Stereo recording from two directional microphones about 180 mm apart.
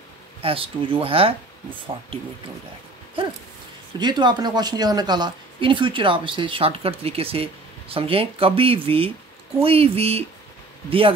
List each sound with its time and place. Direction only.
0.4 s speech: 30° right (ahead or behind)
4.0 s speech: 25° right (ahead or behind)